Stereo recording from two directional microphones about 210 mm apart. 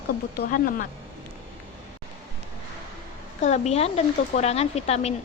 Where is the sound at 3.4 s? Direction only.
30° left (ahead or behind).